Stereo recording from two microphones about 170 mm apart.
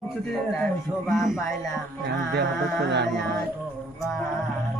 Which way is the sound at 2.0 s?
80° right.